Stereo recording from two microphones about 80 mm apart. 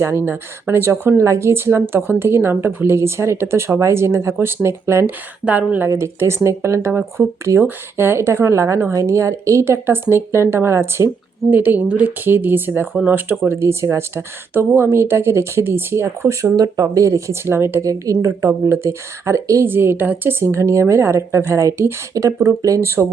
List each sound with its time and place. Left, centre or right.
0.3 s speech: right
5.5 s speech: right
5.9 s speech: right
11.5 s speech: right
16.6 s speech: right
17.8 s a woman's voice: right
18.3 s speech: right
19.6 s speech: right